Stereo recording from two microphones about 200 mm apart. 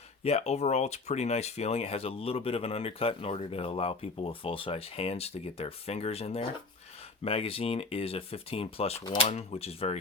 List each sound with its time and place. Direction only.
0.3 s speech: 30° left (ahead or behind)